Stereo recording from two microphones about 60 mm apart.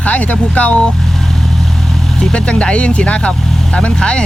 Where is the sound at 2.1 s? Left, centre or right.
Centre.